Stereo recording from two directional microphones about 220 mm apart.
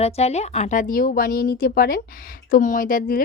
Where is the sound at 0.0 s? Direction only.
30° left (ahead or behind).